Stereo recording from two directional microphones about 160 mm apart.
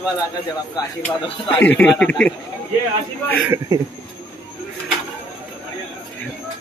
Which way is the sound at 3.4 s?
15° right (ahead or behind).